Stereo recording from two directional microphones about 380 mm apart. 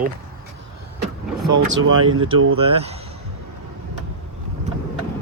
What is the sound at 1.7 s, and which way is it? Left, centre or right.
Speech, right.